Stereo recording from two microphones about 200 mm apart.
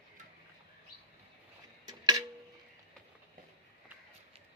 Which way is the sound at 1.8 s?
20° right (ahead or behind).